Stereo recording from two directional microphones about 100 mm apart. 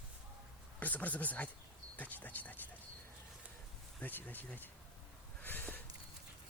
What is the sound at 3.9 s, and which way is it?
Speech, 20° left (ahead or behind).